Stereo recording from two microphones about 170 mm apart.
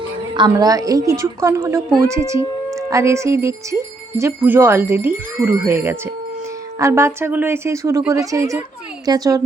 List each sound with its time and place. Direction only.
0.3 s a woman's voice: 25° right (ahead or behind)